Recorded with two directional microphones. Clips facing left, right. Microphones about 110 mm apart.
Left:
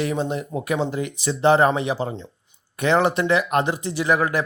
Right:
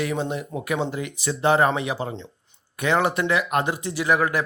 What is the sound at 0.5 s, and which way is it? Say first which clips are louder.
Speech: left 3 dB; 5° left (ahead or behind).